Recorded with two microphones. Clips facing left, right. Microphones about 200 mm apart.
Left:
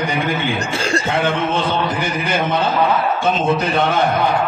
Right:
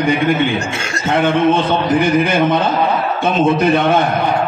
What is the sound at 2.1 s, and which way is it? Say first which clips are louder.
Speech: right 6 dB; 55° right (ahead or behind).